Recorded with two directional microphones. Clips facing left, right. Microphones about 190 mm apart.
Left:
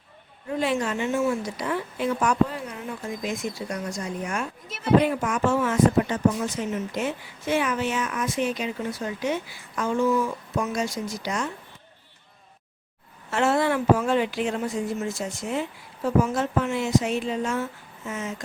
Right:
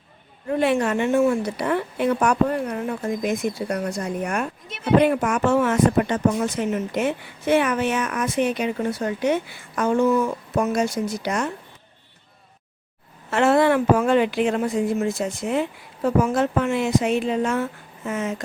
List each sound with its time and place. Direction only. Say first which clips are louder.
0.4 s speech: right 5 dB; 60° right (ahead or behind)
13.3 s speech: right 5 dB; 60° right (ahead or behind)